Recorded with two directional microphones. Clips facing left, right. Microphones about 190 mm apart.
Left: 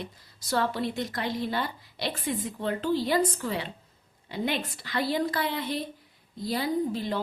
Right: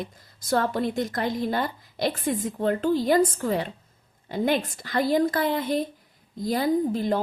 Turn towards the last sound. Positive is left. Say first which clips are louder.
# right 5 dB
turn(degrees=-45)  # may be behind; listen again after turning